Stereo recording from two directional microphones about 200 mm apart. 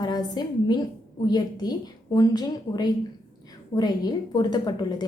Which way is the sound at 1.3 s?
20° left (ahead or behind).